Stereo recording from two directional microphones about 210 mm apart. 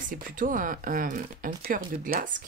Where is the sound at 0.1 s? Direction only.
40° right (ahead or behind).